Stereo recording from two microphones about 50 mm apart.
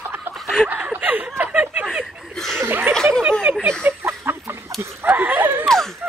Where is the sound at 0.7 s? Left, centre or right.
Right.